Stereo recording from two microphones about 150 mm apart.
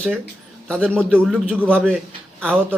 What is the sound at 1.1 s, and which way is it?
Speech, 10° right (ahead or behind).